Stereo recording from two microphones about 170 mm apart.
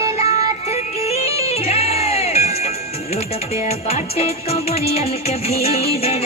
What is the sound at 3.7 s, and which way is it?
Music, 35° left (ahead or behind).